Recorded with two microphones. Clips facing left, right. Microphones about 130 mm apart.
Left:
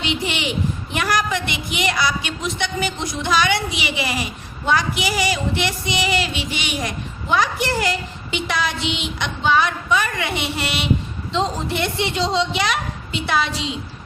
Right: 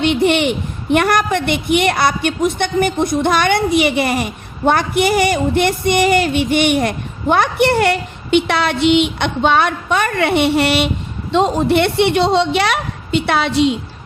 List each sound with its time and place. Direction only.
0.0 s a woman's voice: 55° right (ahead or behind)